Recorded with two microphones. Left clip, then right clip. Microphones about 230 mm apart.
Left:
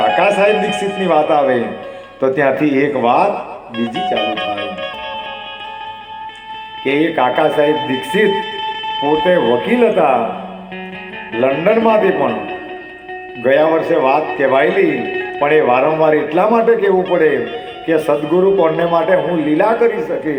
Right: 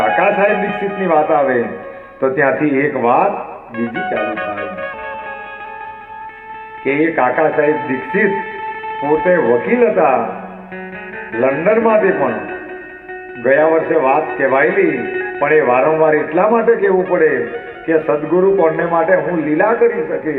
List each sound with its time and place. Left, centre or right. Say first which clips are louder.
0.0 s speech: left 1 dB; left
6.8 s speech: even; left
11.3 s speech: even; left